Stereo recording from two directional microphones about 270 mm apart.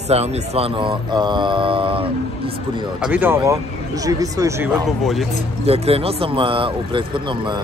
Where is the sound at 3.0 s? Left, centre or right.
Centre.